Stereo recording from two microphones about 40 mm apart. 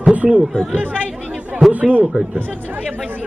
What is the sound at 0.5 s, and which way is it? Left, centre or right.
Speech, left.